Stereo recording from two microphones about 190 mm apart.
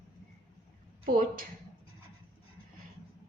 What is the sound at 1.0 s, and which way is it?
Speech, 45° right (ahead or behind).